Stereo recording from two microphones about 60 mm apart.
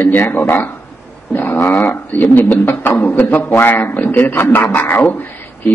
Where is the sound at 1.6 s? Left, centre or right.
Left.